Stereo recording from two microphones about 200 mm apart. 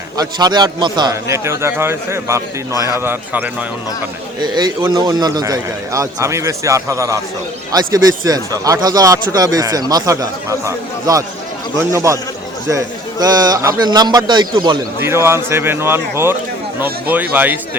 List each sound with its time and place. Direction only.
0.2 s a man's voice: 20° right (ahead or behind)
4.4 s a man's voice: 20° right (ahead or behind)